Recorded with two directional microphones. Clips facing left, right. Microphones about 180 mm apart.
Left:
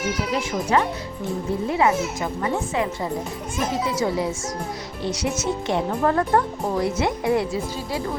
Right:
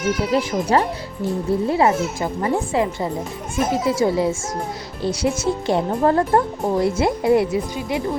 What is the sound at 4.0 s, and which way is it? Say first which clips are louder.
Speech: right 5 dB; 25° right (ahead or behind).